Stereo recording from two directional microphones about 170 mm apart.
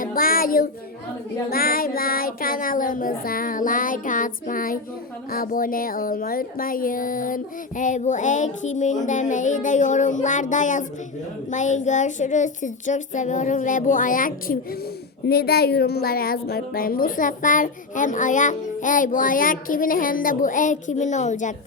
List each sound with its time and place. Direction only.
0.0 s child singing: 55° left (ahead or behind)
5.3 s a woman's voice: 55° left (ahead or behind)
15.3 s a woman's voice: 65° left (ahead or behind); by 21.5 s 45° left (ahead or behind)